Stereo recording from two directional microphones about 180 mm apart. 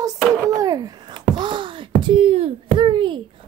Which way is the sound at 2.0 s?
30° right (ahead or behind).